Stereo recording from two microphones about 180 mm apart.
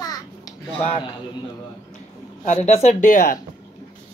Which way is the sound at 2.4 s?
40° left (ahead or behind).